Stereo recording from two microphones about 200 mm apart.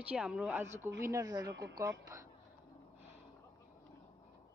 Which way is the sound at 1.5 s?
60° right (ahead or behind).